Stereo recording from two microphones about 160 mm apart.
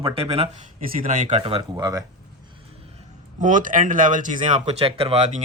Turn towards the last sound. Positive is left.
turn(degrees=-45)  # may be behind; listen again after turning